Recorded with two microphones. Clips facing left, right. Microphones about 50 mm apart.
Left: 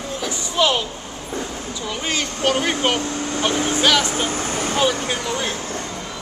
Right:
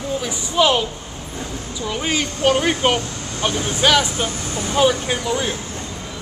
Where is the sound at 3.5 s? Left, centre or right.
Left.